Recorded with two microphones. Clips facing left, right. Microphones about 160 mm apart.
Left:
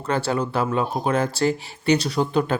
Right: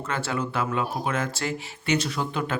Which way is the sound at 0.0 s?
35° left (ahead or behind).